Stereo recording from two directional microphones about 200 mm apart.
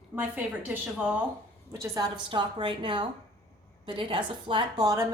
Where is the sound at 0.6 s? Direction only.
5° right (ahead or behind).